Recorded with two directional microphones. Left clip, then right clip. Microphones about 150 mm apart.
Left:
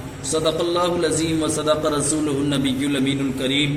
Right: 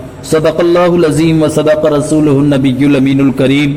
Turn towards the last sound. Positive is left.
turn(degrees=-50)  # may be behind; listen again after turning